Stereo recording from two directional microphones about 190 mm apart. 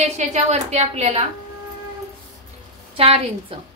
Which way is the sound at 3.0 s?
30° right (ahead or behind).